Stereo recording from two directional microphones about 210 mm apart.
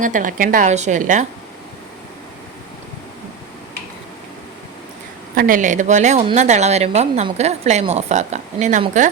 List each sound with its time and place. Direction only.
0.0 s a woman's voice: 40° right (ahead or behind)
5.3 s a woman's voice: 40° right (ahead or behind)